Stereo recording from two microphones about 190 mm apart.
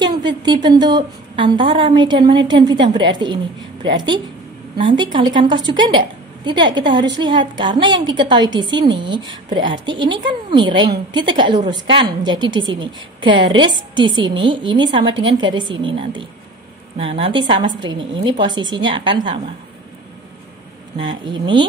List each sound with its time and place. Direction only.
0.0 s a sound: 25° right (ahead or behind)
0.4 s a woman's voice: 25° right (ahead or behind)
21.0 s a woman's voice: 25° right (ahead or behind)